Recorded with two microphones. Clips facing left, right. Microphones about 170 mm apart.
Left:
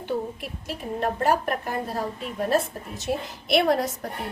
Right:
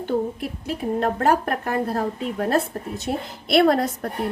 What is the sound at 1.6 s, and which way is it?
A woman's voice, 60° right (ahead or behind).